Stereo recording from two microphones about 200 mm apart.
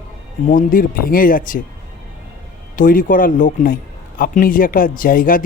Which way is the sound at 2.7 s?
40° left (ahead or behind).